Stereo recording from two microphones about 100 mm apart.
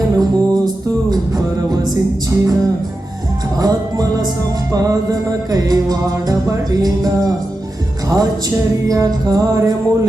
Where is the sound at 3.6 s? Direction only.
40° right (ahead or behind).